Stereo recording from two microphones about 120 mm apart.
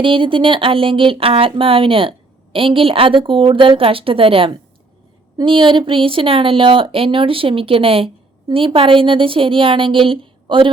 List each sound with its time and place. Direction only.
0.0 s speech: 45° right (ahead or behind)